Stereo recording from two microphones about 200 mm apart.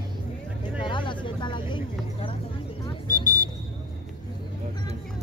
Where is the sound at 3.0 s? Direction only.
40° left (ahead or behind).